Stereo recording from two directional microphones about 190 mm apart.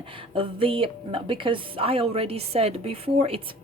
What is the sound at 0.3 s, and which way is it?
Speech, 30° right (ahead or behind).